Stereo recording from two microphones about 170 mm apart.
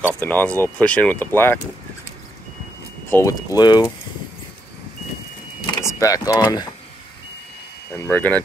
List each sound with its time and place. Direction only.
0.2 s speech: 10° left (ahead or behind)
3.1 s speech: 15° left (ahead or behind)
5.7 s speech: 15° left (ahead or behind)
7.9 s speech: 10° left (ahead or behind)